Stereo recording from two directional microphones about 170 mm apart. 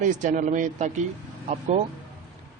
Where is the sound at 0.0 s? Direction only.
45° right (ahead or behind).